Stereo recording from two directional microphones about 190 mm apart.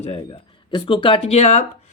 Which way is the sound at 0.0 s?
30° left (ahead or behind).